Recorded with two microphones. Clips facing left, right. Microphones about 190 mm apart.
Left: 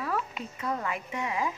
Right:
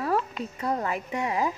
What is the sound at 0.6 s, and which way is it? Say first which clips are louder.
Speech: right 4 dB; 35° right (ahead or behind).